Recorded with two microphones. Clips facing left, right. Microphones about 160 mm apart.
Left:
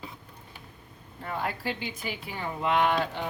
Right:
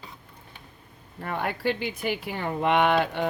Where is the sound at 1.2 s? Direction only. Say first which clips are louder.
Right 5 dB; 65° right (ahead or behind).